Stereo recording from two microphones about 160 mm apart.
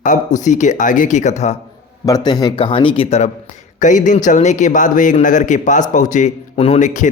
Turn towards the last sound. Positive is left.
turn(degrees=50)  # may be behind; listen again after turning